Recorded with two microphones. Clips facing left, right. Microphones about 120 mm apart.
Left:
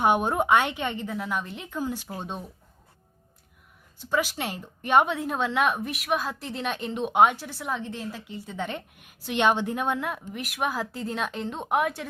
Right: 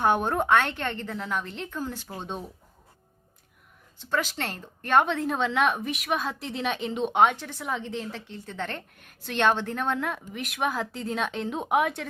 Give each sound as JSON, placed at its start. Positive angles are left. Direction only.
{"t": 0.0, "sound": "a woman's voice", "side_deg": 15}
{"t": 4.0, "sound": "a woman's voice", "side_deg": 10}